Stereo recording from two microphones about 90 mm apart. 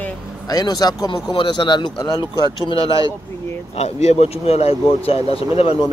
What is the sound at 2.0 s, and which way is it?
Speech, 40° left (ahead or behind).